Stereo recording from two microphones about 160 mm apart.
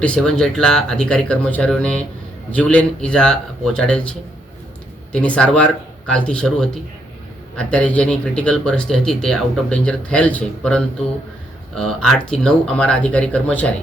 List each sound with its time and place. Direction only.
0.0 s speech: 5° left (ahead or behind)
5.1 s speech: 5° left (ahead or behind)